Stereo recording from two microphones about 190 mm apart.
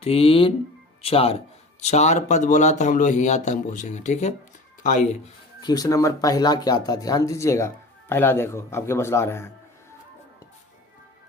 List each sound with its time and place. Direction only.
0.0 s speech: 30° left (ahead or behind)
5.6 s speech: 20° left (ahead or behind)